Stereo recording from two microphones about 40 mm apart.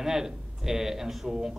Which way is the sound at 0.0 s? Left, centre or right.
Centre.